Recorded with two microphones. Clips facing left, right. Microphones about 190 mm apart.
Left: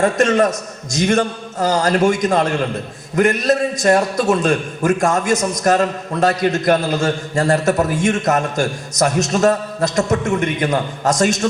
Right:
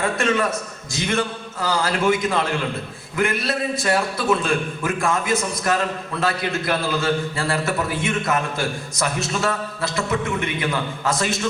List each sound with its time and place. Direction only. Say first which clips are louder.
0.0 s a man's voice: left 7 dB; 40° left (ahead or behind)